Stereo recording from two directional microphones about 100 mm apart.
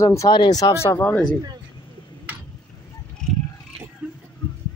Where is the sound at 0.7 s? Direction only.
25° left (ahead or behind).